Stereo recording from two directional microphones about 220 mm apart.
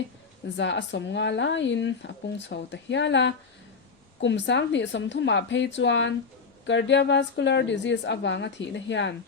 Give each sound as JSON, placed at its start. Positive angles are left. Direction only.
{"t": 0.5, "sound": "a woman's voice", "side_deg": 55}